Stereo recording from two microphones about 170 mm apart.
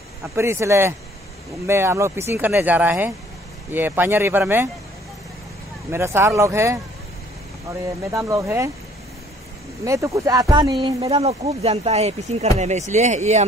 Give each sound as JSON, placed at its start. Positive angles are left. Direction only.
{"t": 0.2, "sound": "speech", "side_deg": -15}
{"t": 5.9, "sound": "speech", "side_deg": -15}
{"t": 8.1, "sound": "speech", "side_deg": -20}
{"t": 9.8, "sound": "speech", "side_deg": -20}